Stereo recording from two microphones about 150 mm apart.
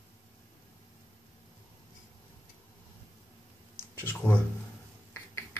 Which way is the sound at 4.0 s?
10° left (ahead or behind).